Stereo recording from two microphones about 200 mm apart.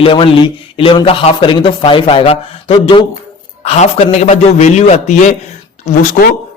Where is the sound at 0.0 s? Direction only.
25° left (ahead or behind).